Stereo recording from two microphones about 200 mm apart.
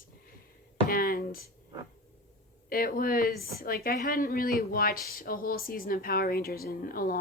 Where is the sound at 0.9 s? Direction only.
45° left (ahead or behind).